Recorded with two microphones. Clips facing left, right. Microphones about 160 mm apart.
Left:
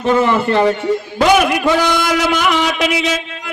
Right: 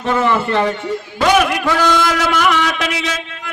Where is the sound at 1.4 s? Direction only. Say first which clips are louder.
Left 2 dB; 10° left (ahead or behind).